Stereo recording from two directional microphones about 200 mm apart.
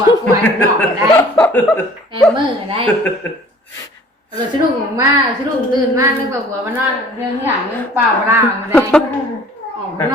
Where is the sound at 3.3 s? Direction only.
10° left (ahead or behind).